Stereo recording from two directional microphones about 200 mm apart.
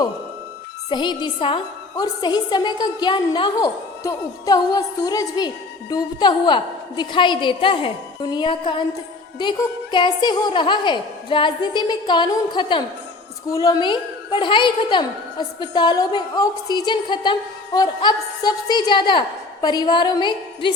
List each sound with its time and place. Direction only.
0.9 s a woman's voice: 20° left (ahead or behind)